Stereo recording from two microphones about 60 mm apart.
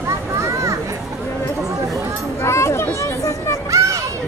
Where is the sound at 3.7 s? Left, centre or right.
Right.